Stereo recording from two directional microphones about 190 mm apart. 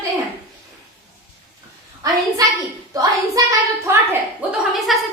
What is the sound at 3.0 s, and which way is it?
Child singing, 15° right (ahead or behind).